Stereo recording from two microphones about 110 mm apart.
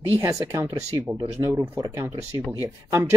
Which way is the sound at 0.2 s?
30° right (ahead or behind).